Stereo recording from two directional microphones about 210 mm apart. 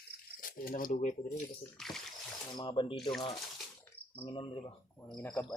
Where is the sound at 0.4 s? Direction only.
40° left (ahead or behind).